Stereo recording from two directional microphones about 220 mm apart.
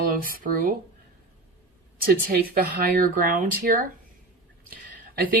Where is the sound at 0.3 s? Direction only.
40° right (ahead or behind).